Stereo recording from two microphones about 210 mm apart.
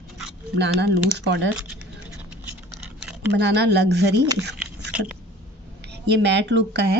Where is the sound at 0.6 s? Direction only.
55° right (ahead or behind).